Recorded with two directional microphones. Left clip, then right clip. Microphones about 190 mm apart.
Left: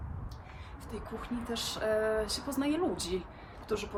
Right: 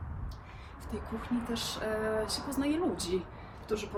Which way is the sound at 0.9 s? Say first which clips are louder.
Right 3 dB; 10° left (ahead or behind).